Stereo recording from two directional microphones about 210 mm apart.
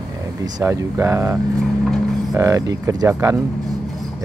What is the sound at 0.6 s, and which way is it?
Speech, 10° right (ahead or behind).